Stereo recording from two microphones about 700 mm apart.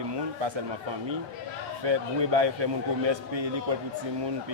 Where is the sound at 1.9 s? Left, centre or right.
Right.